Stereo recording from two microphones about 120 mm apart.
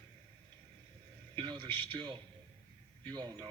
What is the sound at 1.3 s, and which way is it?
A man's voice, 45° right (ahead or behind).